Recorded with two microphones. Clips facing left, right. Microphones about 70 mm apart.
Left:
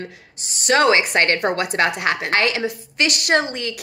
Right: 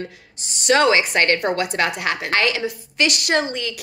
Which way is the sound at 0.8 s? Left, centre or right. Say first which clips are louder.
Even; left.